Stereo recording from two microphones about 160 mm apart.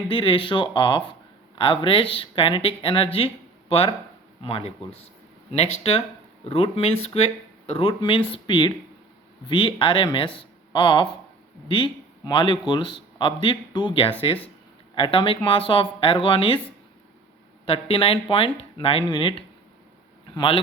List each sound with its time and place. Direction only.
0.1 s a man's voice: 30° left (ahead or behind)
17.7 s a man's voice: 35° left (ahead or behind)